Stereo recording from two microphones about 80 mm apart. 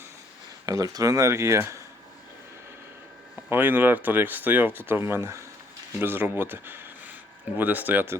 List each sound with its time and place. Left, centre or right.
0.6 s speech: right
3.5 s speech: right